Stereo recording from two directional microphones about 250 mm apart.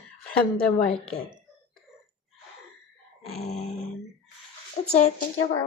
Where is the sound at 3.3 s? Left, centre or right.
Left.